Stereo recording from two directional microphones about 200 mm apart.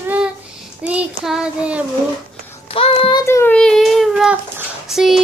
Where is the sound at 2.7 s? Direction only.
25° left (ahead or behind).